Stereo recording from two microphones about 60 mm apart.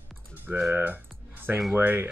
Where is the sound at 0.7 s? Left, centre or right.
Right.